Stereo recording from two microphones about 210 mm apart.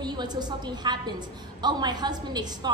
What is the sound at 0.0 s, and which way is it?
A woman's voice, 20° right (ahead or behind).